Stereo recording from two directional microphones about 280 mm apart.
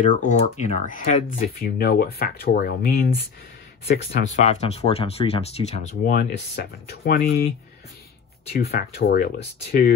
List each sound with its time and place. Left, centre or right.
0.2 s speech: left
8.5 s speech: left